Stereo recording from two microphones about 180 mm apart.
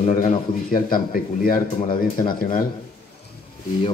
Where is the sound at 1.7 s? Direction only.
30° left (ahead or behind).